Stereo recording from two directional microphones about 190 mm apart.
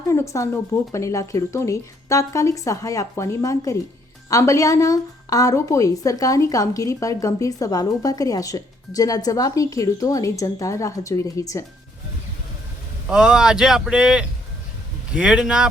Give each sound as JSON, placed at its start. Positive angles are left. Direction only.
{"t": 0.1, "sound": "a woman's voice", "side_deg": 15}
{"t": 13.1, "sound": "speech", "side_deg": -5}